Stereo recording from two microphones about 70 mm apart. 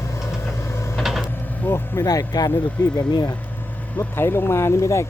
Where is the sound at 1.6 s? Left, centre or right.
Left.